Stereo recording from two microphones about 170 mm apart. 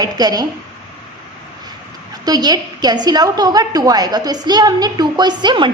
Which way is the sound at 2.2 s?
25° right (ahead or behind).